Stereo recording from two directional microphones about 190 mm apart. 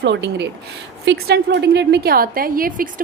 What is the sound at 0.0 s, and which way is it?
A woman's voice, 65° right (ahead or behind).